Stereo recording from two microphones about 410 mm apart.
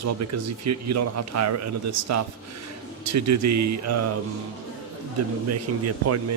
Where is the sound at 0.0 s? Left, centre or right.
Right.